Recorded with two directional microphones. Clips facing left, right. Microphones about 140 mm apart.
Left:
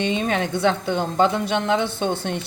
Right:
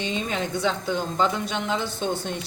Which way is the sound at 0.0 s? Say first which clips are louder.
Left 5 dB; 60° left (ahead or behind).